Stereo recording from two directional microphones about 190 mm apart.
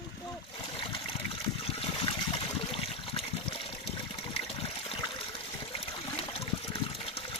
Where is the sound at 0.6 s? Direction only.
25° left (ahead or behind).